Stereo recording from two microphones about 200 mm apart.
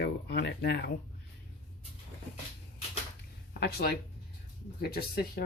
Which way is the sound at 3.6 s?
50° left (ahead or behind).